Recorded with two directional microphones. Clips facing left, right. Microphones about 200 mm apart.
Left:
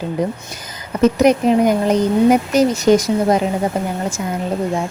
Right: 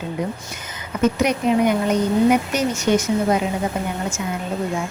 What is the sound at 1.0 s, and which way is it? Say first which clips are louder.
Speech: left 6 dB; 40° left (ahead or behind).